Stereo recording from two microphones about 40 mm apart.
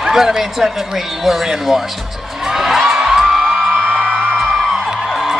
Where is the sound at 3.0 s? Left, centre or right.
Centre.